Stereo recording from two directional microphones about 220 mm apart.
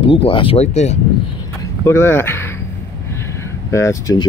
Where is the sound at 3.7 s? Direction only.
15° left (ahead or behind).